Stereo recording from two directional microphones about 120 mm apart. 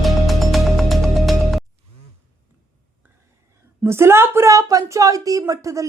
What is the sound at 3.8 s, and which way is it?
Speech, 20° right (ahead or behind).